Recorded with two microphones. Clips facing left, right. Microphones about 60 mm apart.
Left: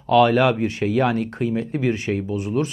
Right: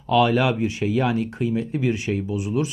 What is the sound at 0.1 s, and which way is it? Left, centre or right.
Speech, left.